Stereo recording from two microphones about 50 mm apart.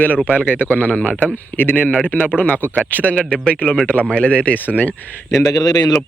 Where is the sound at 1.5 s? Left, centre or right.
Left.